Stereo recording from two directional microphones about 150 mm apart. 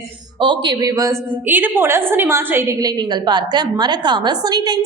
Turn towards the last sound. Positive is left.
turn(degrees=-30)  # may be behind; listen again after turning